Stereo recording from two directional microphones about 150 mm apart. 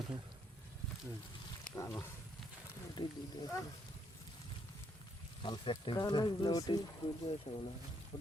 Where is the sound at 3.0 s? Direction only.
30° left (ahead or behind).